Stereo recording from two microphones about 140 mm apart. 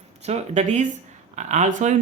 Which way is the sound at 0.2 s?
50° right (ahead or behind).